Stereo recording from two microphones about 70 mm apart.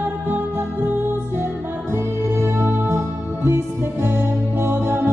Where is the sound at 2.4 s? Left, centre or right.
Right.